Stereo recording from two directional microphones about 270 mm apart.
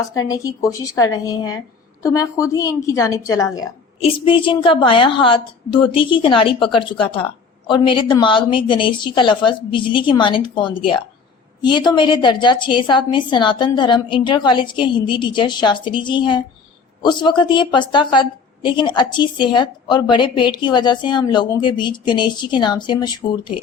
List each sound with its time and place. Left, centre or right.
0.1 s a woman's voice: centre